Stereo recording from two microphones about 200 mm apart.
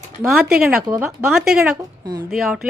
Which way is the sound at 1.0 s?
5° right (ahead or behind).